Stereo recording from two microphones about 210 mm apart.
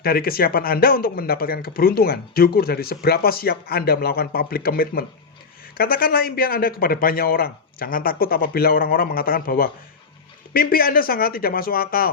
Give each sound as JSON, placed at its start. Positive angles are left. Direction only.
{"t": 0.0, "sound": "speech", "side_deg": 45}